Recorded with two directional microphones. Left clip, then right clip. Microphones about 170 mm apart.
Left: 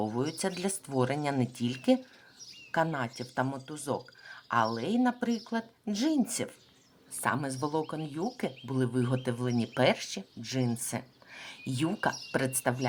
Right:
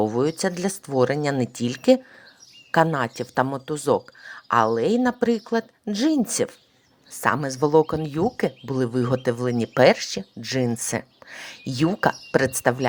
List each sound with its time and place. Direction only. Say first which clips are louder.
0.0 s speech: right 10 dB; 35° right (ahead or behind)